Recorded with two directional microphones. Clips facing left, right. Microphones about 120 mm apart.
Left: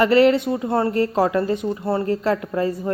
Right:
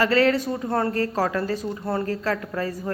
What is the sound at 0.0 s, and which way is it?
A woman's voice, 25° left (ahead or behind).